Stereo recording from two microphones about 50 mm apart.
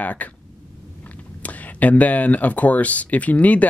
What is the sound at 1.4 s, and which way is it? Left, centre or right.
Speech, left.